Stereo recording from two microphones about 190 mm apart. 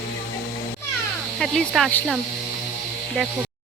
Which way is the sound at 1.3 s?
Centre (ahead or behind).